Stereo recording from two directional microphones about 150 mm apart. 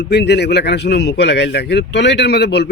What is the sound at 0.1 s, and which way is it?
Speech, 90° left.